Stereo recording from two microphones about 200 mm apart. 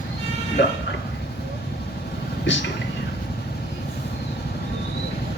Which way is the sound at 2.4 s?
65° left (ahead or behind).